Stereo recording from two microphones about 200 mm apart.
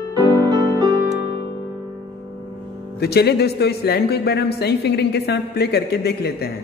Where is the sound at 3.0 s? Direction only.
55° left (ahead or behind).